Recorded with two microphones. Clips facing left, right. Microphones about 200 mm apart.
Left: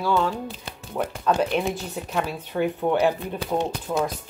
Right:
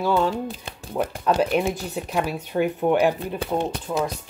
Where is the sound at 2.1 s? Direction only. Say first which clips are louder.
Right 2 dB; 10° right (ahead or behind).